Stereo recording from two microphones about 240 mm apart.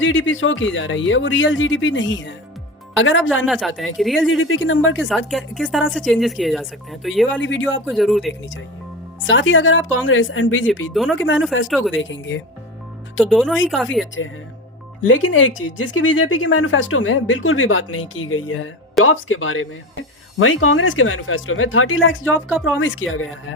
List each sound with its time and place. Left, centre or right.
0.0 s speech: left
3.4 s speech: centre
4.3 s speech: left
5.0 s speech: centre
7.3 s speech: left
7.9 s speech: centre
8.3 s speech: left
10.9 s speech: centre
11.9 s speech: left
13.1 s speech: centre
14.2 s speech: left